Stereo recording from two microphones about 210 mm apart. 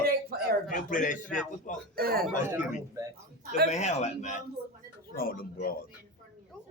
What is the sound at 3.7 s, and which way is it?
A man's voice, 35° left (ahead or behind).